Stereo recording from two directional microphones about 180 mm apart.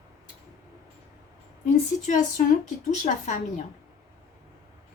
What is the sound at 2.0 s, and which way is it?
Speech, 45° left (ahead or behind).